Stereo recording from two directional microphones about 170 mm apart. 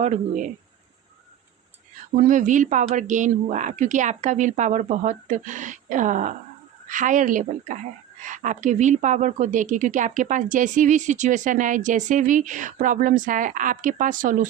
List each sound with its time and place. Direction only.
0.0 s a woman's voice: 45° right (ahead or behind)
2.1 s a woman's voice: 50° right (ahead or behind)